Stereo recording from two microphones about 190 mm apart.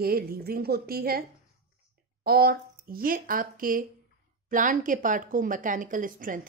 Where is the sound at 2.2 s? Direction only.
55° right (ahead or behind).